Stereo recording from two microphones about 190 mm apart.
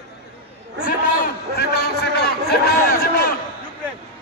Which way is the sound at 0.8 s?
55° left (ahead or behind).